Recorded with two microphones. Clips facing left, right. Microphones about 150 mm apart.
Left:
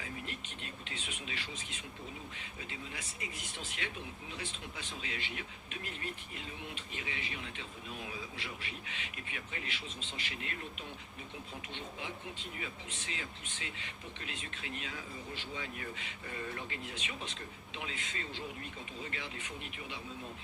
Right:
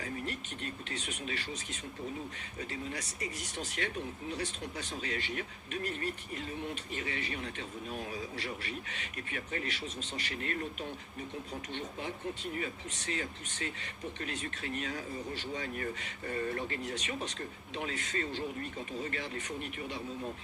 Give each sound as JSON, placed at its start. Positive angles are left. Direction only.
{"t": 0.0, "sound": "speech", "side_deg": -45}
{"t": 12.5, "sound": "speech", "side_deg": -45}